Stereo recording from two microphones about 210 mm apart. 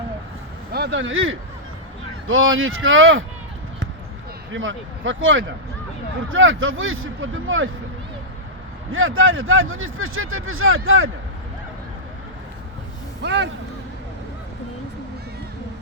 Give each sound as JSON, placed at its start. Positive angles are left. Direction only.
{"t": 0.7, "sound": "speech", "side_deg": -55}
{"t": 4.5, "sound": "speech", "side_deg": -65}
{"t": 8.9, "sound": "speech", "side_deg": -75}
{"t": 13.2, "sound": "speech", "side_deg": -55}